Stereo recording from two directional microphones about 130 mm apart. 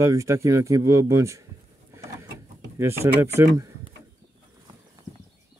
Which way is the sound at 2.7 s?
20° right (ahead or behind).